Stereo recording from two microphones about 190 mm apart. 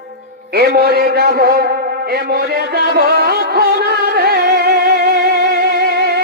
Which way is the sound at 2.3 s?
55° right (ahead or behind).